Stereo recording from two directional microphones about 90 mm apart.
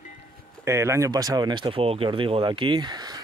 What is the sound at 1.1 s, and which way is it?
Speech, 45° right (ahead or behind).